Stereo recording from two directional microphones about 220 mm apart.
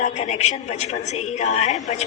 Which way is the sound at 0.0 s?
30° left (ahead or behind).